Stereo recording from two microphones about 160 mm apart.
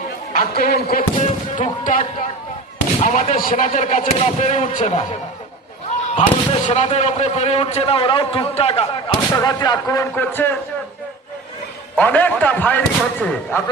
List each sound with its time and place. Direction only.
0.3 s a man's voice: 65° left (ahead or behind)
1.2 s speech: 50° left (ahead or behind)
6.1 s speech: 45° left (ahead or behind)
9.3 s speech: 25° left (ahead or behind)
11.9 s speech: 10° left (ahead or behind)